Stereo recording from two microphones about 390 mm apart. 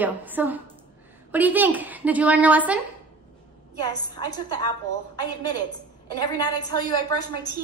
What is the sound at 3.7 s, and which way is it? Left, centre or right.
Speech, centre.